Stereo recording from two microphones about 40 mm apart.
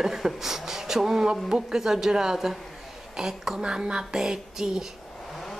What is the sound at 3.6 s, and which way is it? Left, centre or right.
A woman's voice, right.